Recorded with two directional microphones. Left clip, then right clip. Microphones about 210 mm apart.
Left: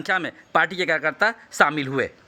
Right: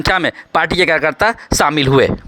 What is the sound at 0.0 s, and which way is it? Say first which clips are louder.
Speech: right 9 dB; 35° right (ahead or behind).